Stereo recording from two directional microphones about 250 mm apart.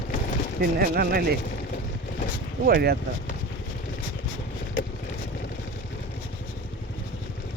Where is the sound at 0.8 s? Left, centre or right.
Right.